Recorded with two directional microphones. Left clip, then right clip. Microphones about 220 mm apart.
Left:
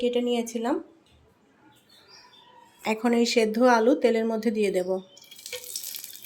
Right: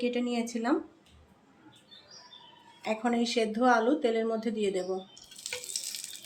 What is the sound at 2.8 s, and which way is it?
Speech, 35° left (ahead or behind).